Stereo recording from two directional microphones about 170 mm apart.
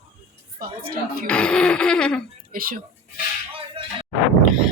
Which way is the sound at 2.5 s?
60° right (ahead or behind).